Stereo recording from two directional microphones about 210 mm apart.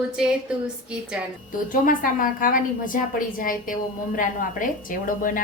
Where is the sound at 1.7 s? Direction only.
40° left (ahead or behind).